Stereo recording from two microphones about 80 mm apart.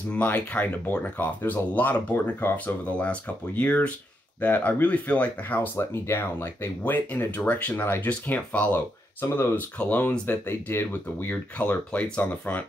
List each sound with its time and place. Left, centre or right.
0.1 s speech: centre